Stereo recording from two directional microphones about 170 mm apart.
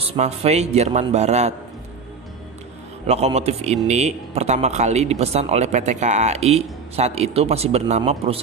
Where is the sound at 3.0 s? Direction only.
40° right (ahead or behind).